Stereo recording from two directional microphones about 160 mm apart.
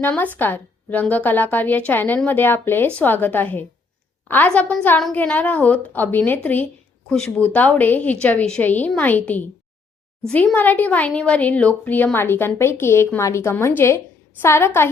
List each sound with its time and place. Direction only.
0.0 s speech: 10° left (ahead or behind)